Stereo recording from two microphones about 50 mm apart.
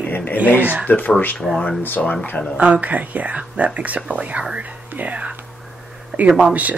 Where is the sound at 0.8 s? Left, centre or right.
Left.